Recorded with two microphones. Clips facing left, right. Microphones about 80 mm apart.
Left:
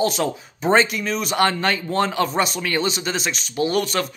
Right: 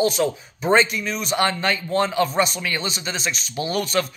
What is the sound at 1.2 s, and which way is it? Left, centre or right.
Speech, left.